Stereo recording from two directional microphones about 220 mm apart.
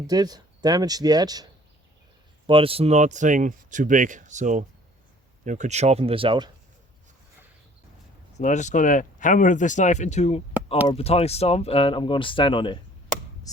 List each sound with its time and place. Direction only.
0.1 s speech: 15° right (ahead or behind)
2.5 s speech: 25° right (ahead or behind)
8.4 s speech: 30° left (ahead or behind)